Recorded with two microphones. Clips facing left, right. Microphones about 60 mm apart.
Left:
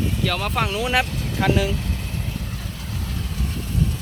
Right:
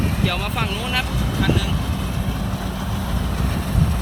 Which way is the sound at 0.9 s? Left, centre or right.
Centre.